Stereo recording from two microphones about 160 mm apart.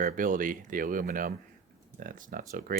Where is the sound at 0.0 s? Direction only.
55° right (ahead or behind).